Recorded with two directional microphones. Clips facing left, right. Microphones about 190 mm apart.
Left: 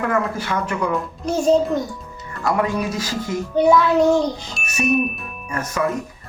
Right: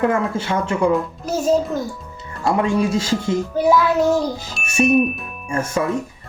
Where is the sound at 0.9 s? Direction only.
5° right (ahead or behind).